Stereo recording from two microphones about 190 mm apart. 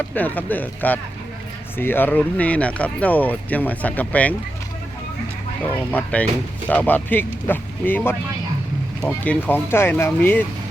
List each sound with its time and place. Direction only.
0.1 s speech: 10° left (ahead or behind)
5.6 s speech: 10° left (ahead or behind)